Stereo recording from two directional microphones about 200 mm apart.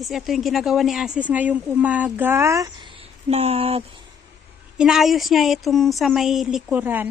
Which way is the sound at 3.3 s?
30° right (ahead or behind).